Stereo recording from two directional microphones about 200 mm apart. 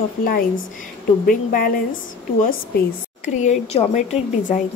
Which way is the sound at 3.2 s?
35° left (ahead or behind).